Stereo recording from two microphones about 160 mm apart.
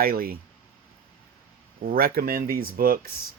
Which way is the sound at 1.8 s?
70° right (ahead or behind).